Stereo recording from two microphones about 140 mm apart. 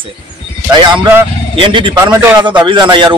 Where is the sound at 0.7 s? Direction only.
35° right (ahead or behind).